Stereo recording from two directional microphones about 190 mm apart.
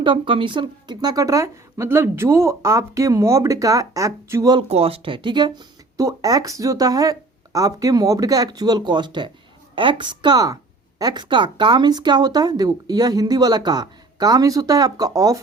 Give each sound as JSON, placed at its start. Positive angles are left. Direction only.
{"t": 0.0, "sound": "speech", "side_deg": -25}
{"t": 4.7, "sound": "speech", "side_deg": -30}